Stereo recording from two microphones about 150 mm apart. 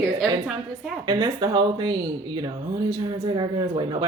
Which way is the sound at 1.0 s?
30° right (ahead or behind).